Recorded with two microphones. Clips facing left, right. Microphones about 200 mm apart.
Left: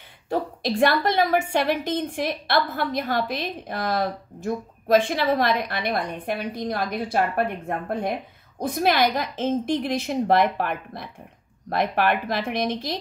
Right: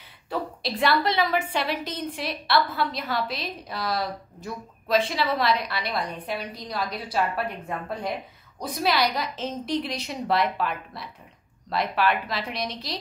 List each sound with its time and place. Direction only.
0.3 s a woman's voice: 50° left (ahead or behind)